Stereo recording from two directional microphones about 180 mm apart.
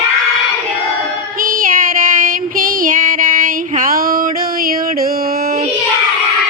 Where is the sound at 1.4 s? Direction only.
50° right (ahead or behind).